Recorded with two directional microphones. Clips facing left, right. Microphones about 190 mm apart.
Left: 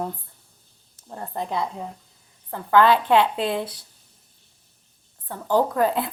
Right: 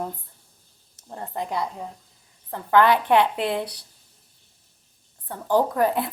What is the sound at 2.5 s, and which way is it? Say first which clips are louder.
Speech: left 1 dB; 20° right (ahead or behind).